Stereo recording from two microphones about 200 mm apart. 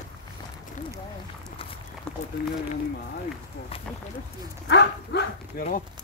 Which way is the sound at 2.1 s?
5° left (ahead or behind).